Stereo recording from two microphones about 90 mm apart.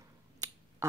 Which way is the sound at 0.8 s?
35° right (ahead or behind).